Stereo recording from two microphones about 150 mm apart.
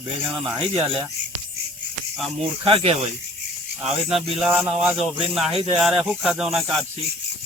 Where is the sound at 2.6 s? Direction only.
40° right (ahead or behind).